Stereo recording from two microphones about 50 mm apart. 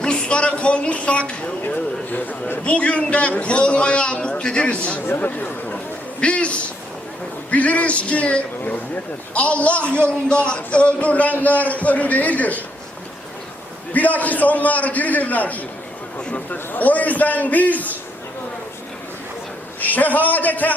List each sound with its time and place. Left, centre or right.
0.0 s speech: centre
1.6 s a sound: left
2.6 s a man's voice: left
5.0 s a man's voice: left
5.7 s a sound: left
7.5 s a man's voice: left
13.9 s a man's voice: left
19.8 s a man's voice: left